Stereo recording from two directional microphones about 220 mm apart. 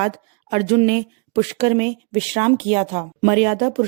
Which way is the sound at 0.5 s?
35° right (ahead or behind).